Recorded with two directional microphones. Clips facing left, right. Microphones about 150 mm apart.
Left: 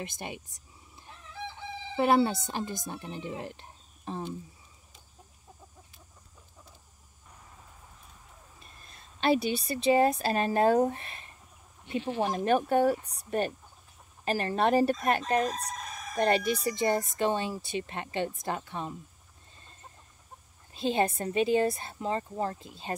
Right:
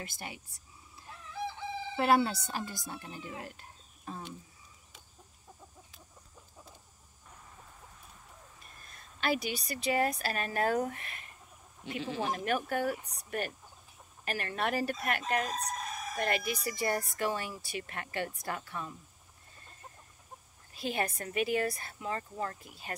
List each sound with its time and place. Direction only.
0.0 s speech: 20° left (ahead or behind)
2.0 s speech: 20° left (ahead or behind)
8.8 s speech: 25° left (ahead or behind)
15.4 s fowl: centre (ahead or behind)
16.2 s speech: 30° left (ahead or behind)
20.7 s speech: 25° left (ahead or behind)